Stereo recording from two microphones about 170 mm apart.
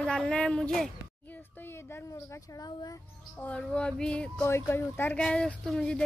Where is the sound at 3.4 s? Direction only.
5° left (ahead or behind).